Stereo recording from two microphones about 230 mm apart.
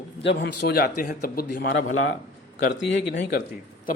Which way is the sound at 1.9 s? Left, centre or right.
Left.